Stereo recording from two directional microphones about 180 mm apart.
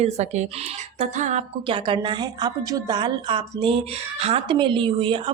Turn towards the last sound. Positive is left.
turn(degrees=-30)  # may be behind; listen again after turning